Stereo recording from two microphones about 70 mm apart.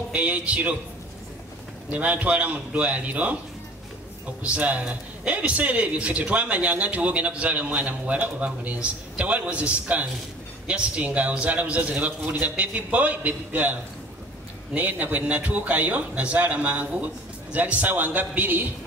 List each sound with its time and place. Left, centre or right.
0.1 s speech: right
1.9 s a man's voice: right
4.4 s a man's voice: centre